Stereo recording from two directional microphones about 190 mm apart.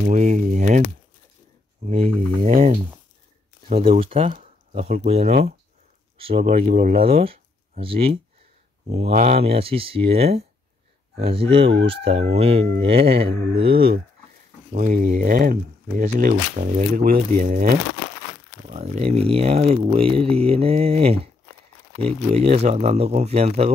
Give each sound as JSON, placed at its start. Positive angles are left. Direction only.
{"t": 0.0, "sound": "speech", "side_deg": -40}
{"t": 2.0, "sound": "mantra", "side_deg": -30}
{"t": 2.5, "sound": "speech", "side_deg": -45}
{"t": 4.0, "sound": "speech", "side_deg": -30}
{"t": 7.0, "sound": "speech", "side_deg": -30}
{"t": 12.8, "sound": "mantra", "side_deg": -30}
{"t": 13.7, "sound": "speech", "side_deg": -50}
{"t": 18.7, "sound": "speech", "side_deg": -35}